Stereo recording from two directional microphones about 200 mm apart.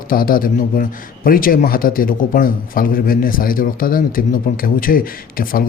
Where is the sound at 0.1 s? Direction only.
45° left (ahead or behind).